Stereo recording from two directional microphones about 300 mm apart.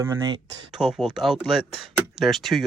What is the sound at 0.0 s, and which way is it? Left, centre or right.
Speech, centre.